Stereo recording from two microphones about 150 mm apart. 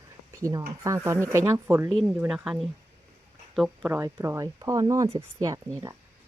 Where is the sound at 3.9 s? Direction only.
15° right (ahead or behind).